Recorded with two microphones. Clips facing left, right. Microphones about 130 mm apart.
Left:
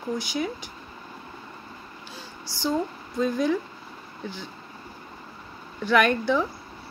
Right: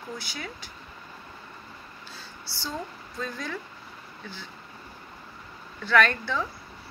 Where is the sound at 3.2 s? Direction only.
15° left (ahead or behind).